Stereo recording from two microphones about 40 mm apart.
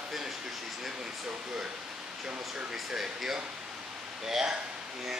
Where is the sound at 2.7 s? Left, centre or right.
Centre.